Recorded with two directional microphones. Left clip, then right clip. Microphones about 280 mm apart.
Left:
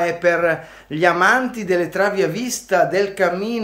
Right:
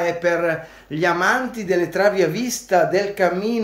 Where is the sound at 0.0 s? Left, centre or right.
Centre.